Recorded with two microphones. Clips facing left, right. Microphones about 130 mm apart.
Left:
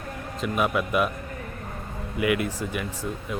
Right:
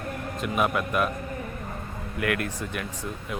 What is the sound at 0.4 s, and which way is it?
Speech, centre (ahead or behind).